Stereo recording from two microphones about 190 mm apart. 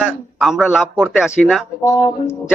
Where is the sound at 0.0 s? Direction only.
5° right (ahead or behind).